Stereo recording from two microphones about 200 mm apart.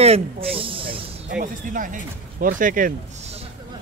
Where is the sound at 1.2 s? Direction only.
45° right (ahead or behind).